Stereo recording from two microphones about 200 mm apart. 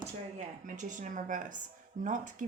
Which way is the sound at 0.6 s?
40° right (ahead or behind).